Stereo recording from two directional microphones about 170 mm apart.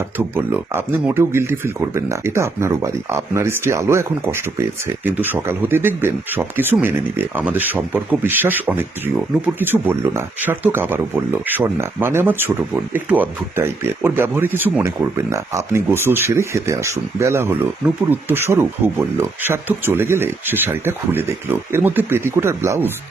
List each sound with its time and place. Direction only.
0.2 s speech: 15° right (ahead or behind)